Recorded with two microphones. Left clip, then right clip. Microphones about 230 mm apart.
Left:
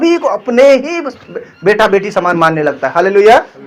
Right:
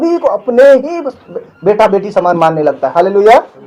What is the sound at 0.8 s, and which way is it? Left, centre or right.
Speech, centre.